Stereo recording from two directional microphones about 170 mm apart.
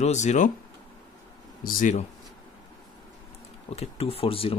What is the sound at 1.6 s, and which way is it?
Speech, 55° left (ahead or behind).